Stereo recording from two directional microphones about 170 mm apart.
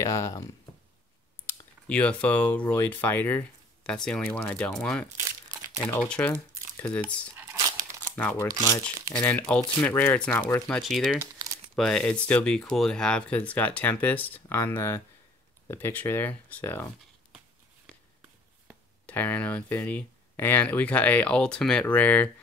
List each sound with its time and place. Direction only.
0.0 s speech: 20° left (ahead or behind)
7.3 s crumpling: 15° right (ahead or behind)
8.2 s speech: 10° left (ahead or behind)
19.0 s speech: 10° left (ahead or behind)